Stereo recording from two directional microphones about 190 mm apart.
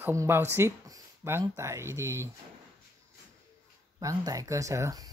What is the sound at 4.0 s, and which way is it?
Speech, 20° right (ahead or behind).